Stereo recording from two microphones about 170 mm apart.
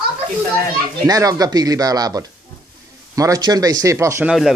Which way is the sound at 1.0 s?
20° right (ahead or behind).